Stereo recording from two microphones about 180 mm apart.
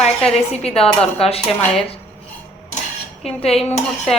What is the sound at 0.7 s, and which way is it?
Speech, 35° left (ahead or behind).